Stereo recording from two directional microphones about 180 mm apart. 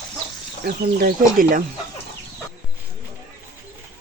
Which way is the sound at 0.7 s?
55° right (ahead or behind).